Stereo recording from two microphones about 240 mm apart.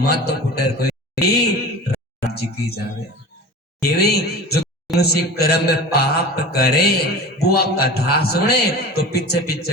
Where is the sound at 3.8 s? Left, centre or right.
Left.